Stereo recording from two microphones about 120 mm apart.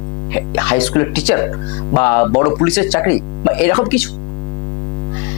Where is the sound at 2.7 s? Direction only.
10° left (ahead or behind).